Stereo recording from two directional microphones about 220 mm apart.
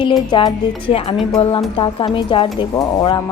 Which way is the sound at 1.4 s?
25° left (ahead or behind).